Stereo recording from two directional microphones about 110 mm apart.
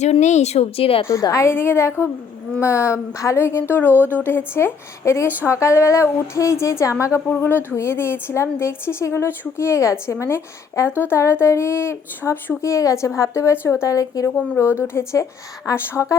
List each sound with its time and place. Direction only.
0.0 s speech: 90° left; by 1.0 s 60° left (ahead or behind)
1.0 s a woman's voice: 30° left (ahead or behind)